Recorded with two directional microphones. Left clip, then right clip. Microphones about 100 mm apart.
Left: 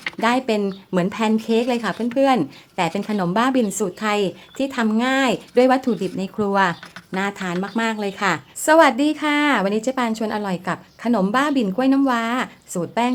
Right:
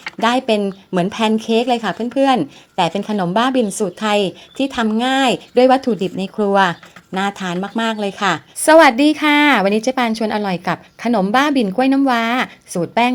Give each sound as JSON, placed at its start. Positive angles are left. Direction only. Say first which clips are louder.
{"t": 0.2, "sound": "speech", "louder": "right 4 dB", "side_deg": -25}
{"t": 4.0, "sound": "speech", "louder": "right 5 dB", "side_deg": -25}